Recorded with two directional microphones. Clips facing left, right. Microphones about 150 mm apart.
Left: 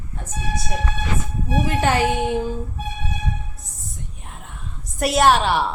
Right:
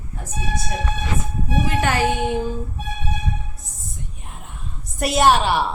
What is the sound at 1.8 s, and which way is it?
Music, 30° left (ahead or behind).